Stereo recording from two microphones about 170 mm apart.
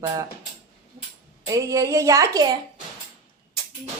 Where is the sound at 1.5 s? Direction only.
20° right (ahead or behind).